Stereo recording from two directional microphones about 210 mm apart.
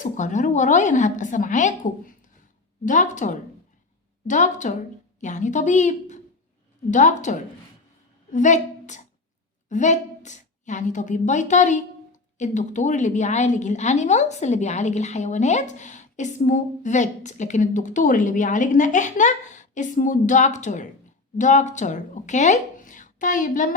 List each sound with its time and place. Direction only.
0.0 s a woman's voice: 35° left (ahead or behind)